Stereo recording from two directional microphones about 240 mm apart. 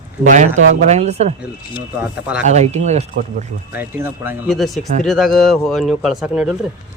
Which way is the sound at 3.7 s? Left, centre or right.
Centre.